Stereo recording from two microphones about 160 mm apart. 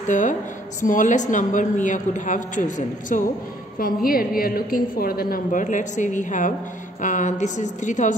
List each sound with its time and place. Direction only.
0.1 s a woman's voice: 50° left (ahead or behind)
3.8 s a woman's voice: 65° left (ahead or behind)